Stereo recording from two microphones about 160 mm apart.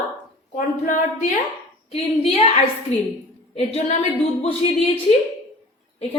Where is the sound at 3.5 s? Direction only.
40° left (ahead or behind).